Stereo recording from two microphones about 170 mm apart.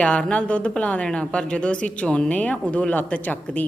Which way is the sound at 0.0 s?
5° left (ahead or behind).